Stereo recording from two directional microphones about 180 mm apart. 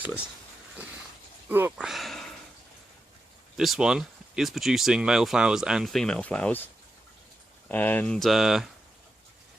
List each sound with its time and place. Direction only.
1.5 s speech: 10° right (ahead or behind)
3.6 s speech: centre (ahead or behind)
7.7 s speech: 10° left (ahead or behind)